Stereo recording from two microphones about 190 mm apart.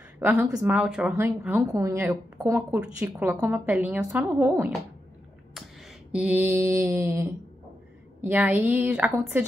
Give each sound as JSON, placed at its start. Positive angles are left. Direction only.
{"t": 0.4, "sound": "speech", "side_deg": -20}
{"t": 0.7, "sound": "speech", "side_deg": -5}
{"t": 6.1, "sound": "speech", "side_deg": -5}